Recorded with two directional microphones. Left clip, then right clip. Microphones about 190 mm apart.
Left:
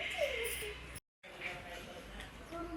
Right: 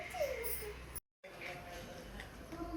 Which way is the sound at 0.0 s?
5° right (ahead or behind).